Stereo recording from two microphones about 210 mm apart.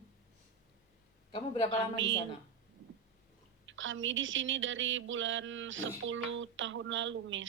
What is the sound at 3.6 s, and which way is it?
Speech, 65° right (ahead or behind).